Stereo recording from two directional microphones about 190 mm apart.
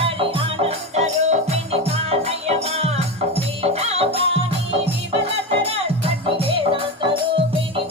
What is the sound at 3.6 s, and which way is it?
Music, 30° right (ahead or behind).